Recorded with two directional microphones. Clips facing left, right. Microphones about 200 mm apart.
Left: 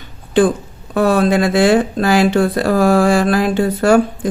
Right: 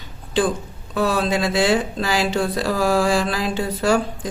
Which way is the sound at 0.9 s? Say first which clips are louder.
Left 7 dB; 55° left (ahead or behind).